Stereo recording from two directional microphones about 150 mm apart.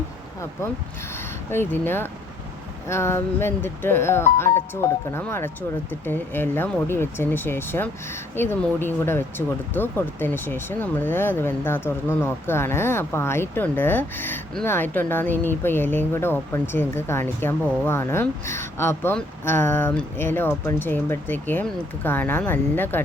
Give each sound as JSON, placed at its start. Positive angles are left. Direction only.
{"t": 1.5, "sound": "speech", "side_deg": 15}